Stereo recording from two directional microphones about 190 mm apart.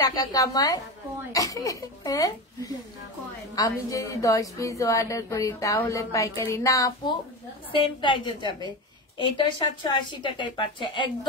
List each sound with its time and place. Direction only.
0.0 s a woman's voice: 20° left (ahead or behind)